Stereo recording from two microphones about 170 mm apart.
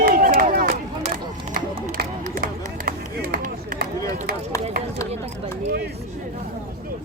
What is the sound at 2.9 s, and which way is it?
Run, 60° right (ahead or behind).